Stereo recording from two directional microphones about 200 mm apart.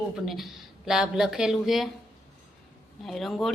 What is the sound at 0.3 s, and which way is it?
Speech, centre (ahead or behind).